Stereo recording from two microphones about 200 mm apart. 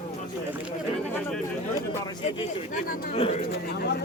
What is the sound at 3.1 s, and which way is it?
Speech, 30° left (ahead or behind).